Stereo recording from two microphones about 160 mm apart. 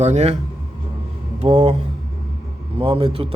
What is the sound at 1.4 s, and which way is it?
Speech, 40° right (ahead or behind).